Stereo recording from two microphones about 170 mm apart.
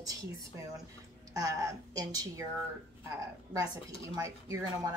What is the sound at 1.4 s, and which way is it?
Speech, 20° right (ahead or behind).